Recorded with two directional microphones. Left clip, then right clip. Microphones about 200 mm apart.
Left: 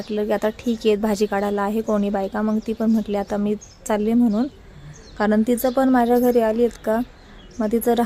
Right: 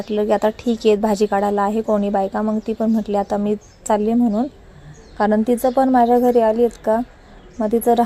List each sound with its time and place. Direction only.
0.0 s speech: 5° right (ahead or behind)